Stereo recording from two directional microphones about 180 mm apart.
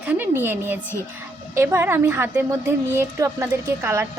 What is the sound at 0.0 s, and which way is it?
A woman's voice, 10° right (ahead or behind).